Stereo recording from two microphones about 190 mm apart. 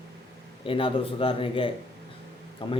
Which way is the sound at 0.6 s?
30° left (ahead or behind).